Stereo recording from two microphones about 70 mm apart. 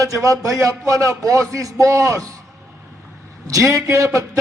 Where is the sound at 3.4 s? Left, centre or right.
Right.